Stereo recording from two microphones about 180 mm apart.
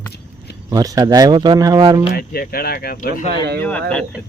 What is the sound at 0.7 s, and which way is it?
Speech, 20° right (ahead or behind).